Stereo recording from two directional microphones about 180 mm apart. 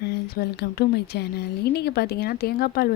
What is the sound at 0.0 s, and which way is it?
Speech, 65° left (ahead or behind).